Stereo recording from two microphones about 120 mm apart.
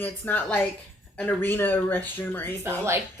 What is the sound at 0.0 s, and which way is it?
A woman's voice, 15° left (ahead or behind).